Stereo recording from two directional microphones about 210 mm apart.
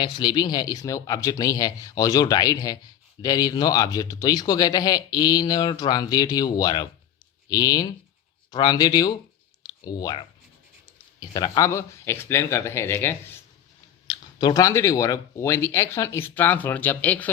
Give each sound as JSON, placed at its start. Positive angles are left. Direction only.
{"t": 0.0, "sound": "speech", "side_deg": 20}